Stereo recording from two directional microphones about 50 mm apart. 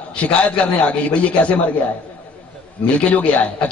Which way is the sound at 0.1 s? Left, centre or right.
Left.